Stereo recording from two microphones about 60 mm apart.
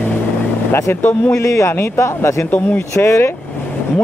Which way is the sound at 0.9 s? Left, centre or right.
Left.